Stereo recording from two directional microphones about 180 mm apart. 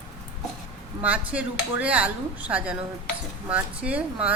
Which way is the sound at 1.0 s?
10° right (ahead or behind).